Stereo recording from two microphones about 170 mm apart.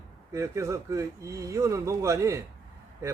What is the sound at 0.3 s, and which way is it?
A man's voice, 15° right (ahead or behind).